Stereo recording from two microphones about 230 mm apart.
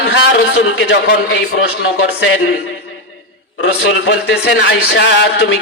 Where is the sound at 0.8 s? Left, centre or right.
Left.